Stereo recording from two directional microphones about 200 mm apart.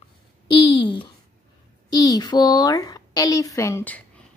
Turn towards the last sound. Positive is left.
turn(degrees=10)  # may be behind; listen again after turning